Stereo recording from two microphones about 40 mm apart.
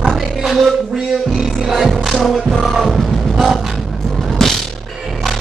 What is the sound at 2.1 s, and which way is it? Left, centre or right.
Music, centre.